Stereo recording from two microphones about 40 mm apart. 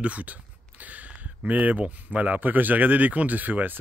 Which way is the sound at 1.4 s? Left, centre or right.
Right.